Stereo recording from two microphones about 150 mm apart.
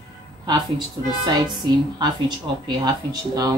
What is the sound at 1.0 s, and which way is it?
Speech, 25° right (ahead or behind).